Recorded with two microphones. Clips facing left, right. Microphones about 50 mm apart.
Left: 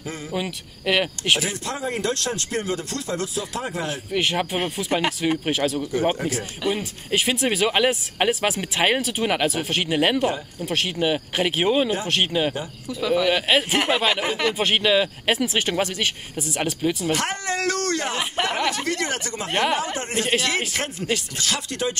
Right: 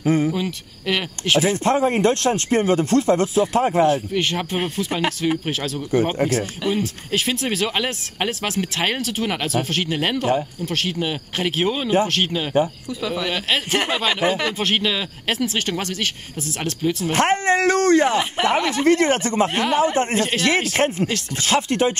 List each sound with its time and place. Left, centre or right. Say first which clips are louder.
0.0 s cricket: right 14 dB; right
0.3 s speech: right 3 dB; centre
1.4 s speech: right 9 dB; right
3.9 s speech: right 2 dB; centre
17.1 s speech: right 7 dB; right
18.1 s speech: right 5 dB; centre
18.9 s speech: right 9 dB; right
19.5 s speech: right 1 dB; centre
19.8 s speech: right 9 dB; right
20.2 s speech: right 1 dB; centre
20.7 s speech: right 5 dB; right